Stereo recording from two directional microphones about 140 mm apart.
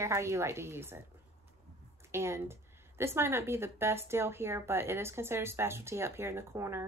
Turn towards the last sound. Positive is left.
turn(degrees=-20)  # may be behind; listen again after turning